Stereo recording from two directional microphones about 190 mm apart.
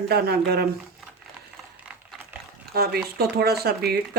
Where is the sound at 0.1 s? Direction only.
55° right (ahead or behind).